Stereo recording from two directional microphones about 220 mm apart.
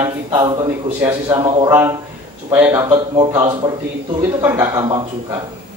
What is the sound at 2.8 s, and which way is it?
A man's voice, 20° right (ahead or behind).